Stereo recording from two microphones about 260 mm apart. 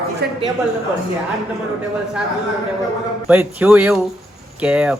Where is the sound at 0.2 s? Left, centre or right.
Right.